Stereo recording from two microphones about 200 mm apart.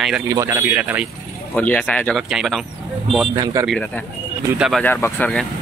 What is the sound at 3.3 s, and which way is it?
Speech, 20° right (ahead or behind).